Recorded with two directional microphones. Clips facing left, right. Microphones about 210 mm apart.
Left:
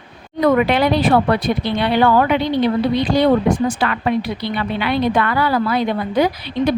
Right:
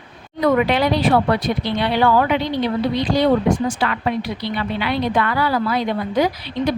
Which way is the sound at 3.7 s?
55° left (ahead or behind).